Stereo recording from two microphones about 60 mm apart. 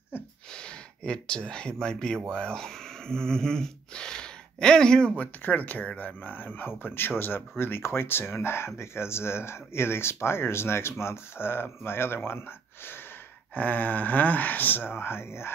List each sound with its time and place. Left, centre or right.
0.5 s speech: centre
5.1 s speech: left
13.6 s speech: left